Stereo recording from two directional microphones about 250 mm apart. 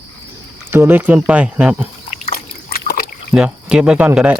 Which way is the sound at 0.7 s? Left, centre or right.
Centre.